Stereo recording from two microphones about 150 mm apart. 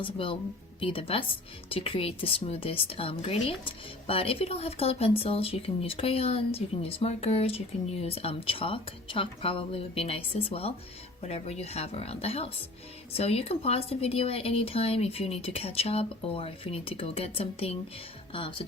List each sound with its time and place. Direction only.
0.0 s speech: 35° left (ahead or behind)